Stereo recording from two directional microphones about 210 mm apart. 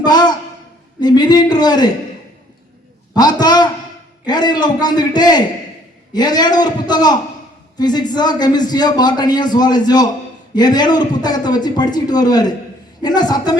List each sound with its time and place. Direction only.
0.0 s a sound: 20° left (ahead or behind)
0.9 s a man's voice: 20° left (ahead or behind)
3.2 s a man's voice: 20° left (ahead or behind)